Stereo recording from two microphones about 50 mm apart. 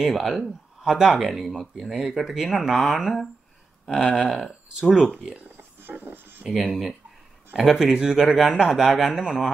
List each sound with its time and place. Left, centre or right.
0.0 s speech: centre
0.8 s speech: centre
5.6 s a sound: right
6.4 s speech: centre